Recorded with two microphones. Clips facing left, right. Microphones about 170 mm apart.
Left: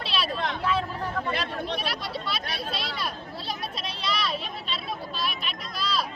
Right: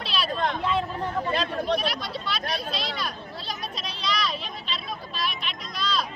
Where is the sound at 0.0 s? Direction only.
Centre (ahead or behind).